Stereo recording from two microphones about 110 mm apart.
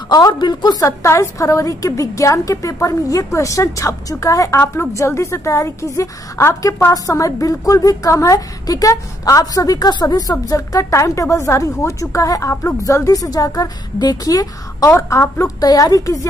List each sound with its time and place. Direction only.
0.1 s a woman's voice: 35° left (ahead or behind)
0.8 s a woman's voice: 25° left (ahead or behind)